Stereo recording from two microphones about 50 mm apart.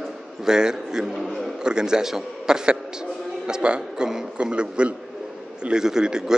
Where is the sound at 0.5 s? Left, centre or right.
Centre.